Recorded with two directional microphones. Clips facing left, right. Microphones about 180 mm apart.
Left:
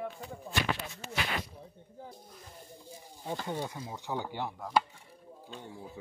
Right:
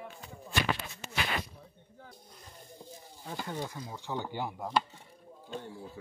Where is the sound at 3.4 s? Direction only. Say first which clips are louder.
Left 2 dB; 10° left (ahead or behind).